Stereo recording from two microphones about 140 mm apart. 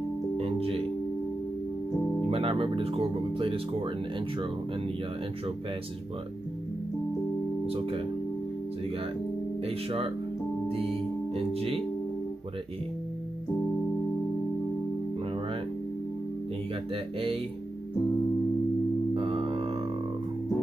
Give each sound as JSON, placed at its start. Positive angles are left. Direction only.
{"t": 0.4, "sound": "music", "side_deg": -45}
{"t": 2.3, "sound": "speech", "side_deg": -40}
{"t": 7.6, "sound": "speech", "side_deg": -45}
{"t": 9.7, "sound": "speech", "side_deg": -45}
{"t": 10.7, "sound": "music", "side_deg": -45}
{"t": 16.9, "sound": "speech", "side_deg": -45}
{"t": 19.1, "sound": "music", "side_deg": -40}